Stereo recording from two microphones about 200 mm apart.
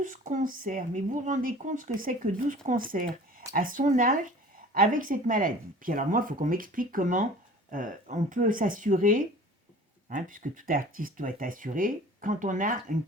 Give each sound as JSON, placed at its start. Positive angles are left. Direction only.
{"t": 0.0, "sound": "speech", "side_deg": -40}